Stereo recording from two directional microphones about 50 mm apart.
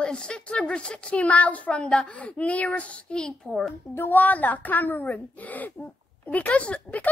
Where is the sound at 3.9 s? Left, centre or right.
Left.